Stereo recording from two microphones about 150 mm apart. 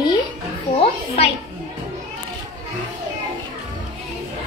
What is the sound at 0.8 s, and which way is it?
Music, 45° left (ahead or behind).